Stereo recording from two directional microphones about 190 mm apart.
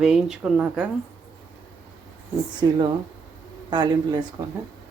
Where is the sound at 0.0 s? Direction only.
5° right (ahead or behind).